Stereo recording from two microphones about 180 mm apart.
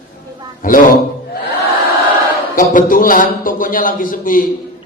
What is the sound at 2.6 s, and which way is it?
A man's voice, 50° left (ahead or behind).